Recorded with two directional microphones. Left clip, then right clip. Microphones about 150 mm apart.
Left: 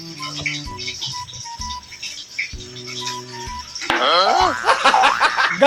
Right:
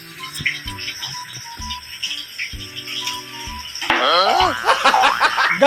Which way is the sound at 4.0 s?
Centre (ahead or behind).